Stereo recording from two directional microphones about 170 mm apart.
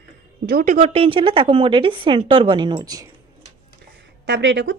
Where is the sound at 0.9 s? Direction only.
30° right (ahead or behind).